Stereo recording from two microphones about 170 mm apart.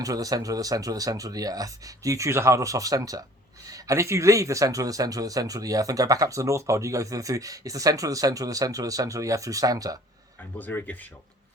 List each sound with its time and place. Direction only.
0.0 s speech: 20° right (ahead or behind)
10.6 s speech: 10° left (ahead or behind)